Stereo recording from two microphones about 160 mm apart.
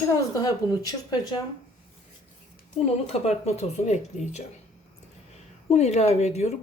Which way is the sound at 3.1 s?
40° left (ahead or behind).